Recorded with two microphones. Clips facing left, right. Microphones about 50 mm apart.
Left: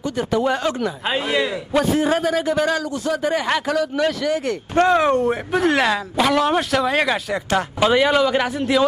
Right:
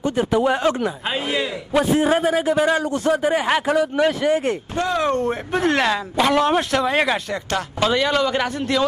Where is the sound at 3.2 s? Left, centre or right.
Centre.